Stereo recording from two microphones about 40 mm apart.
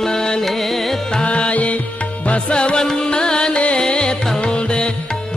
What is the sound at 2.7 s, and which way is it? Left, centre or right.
Music, centre.